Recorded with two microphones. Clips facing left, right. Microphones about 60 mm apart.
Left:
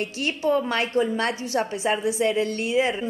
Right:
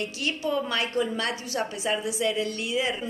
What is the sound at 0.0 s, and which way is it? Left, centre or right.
A woman's voice, left.